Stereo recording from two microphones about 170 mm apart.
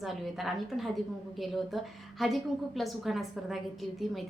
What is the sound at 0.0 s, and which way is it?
A woman's voice, centre (ahead or behind).